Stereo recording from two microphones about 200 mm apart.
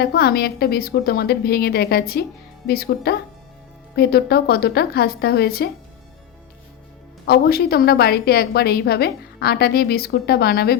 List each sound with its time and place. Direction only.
0.0 s a woman's voice: 50° left (ahead or behind)
7.3 s a woman's voice: 50° left (ahead or behind)